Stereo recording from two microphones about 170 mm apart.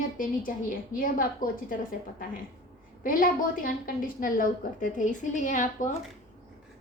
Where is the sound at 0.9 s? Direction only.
55° left (ahead or behind).